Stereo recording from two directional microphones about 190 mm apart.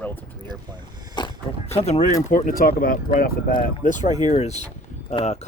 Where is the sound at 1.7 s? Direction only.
35° left (ahead or behind).